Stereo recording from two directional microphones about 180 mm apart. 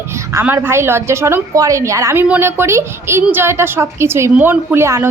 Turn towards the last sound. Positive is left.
turn(degrees=-15)  # may be behind; listen again after turning